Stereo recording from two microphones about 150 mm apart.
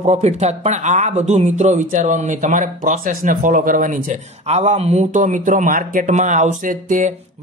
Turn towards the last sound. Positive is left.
turn(degrees=-60)  # may be behind; listen again after turning